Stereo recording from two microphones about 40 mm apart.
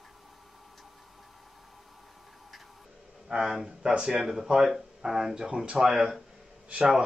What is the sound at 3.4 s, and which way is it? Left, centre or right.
A man's voice, centre.